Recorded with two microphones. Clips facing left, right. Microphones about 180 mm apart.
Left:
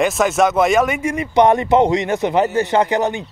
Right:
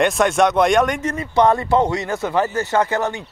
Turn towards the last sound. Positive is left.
turn(degrees=20)  # may be behind; listen again after turning